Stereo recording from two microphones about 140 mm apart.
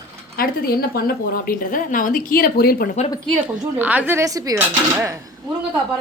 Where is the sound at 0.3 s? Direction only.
90° left.